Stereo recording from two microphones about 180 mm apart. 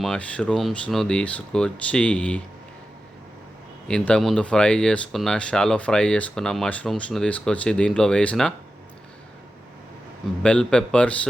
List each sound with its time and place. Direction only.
0.0 s speech: 5° left (ahead or behind)
3.8 s speech: 5° left (ahead or behind)
10.4 s speech: 5° left (ahead or behind)